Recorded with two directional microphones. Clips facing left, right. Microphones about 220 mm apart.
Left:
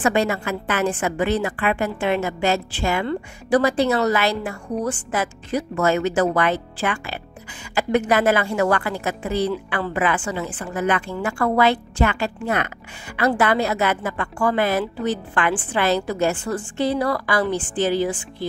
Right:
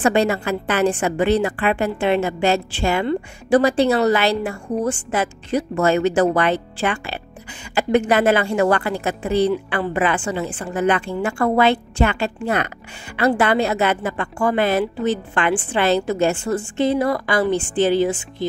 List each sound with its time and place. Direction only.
0.0 s a woman's voice: 30° right (ahead or behind)